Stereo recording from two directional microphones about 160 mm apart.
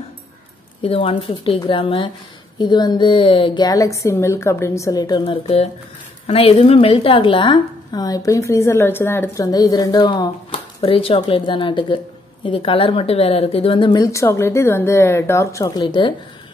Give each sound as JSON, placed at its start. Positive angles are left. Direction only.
{"t": 0.8, "sound": "a woman's voice", "side_deg": 35}
{"t": 5.2, "sound": "a woman's voice", "side_deg": 35}